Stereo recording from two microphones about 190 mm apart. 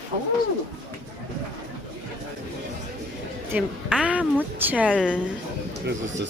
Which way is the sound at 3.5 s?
5° right (ahead or behind).